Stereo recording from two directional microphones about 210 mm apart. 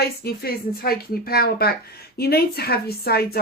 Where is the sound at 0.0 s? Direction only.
45° left (ahead or behind).